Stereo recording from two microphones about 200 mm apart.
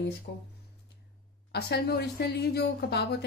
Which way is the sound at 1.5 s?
55° left (ahead or behind).